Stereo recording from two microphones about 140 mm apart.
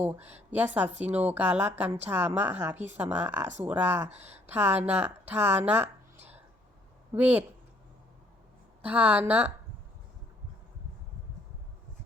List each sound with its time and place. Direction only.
0.5 s speech: 15° right (ahead or behind)
8.8 s speech: 10° right (ahead or behind)